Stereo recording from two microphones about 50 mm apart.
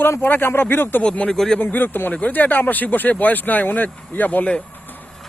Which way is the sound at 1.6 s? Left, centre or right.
Left.